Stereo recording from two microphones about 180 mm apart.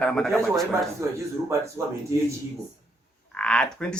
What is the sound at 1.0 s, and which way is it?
Speech, 15° right (ahead or behind).